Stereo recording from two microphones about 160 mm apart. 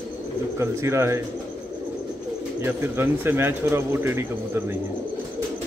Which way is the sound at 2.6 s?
15° right (ahead or behind).